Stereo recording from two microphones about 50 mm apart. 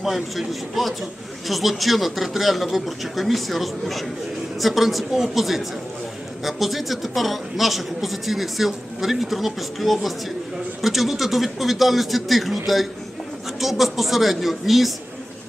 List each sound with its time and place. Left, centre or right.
0.0 s a man's voice: centre